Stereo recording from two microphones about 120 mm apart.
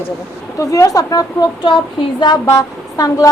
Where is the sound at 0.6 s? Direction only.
30° left (ahead or behind).